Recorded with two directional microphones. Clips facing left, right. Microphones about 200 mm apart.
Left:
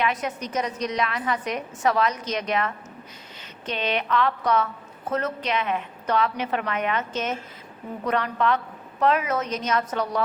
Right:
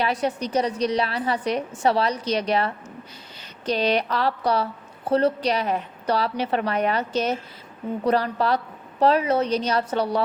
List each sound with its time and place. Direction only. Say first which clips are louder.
0.0 s a woman's voice: right 3 dB; 35° right (ahead or behind)